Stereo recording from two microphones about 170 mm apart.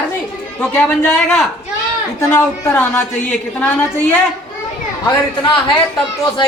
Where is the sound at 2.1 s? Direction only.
15° left (ahead or behind).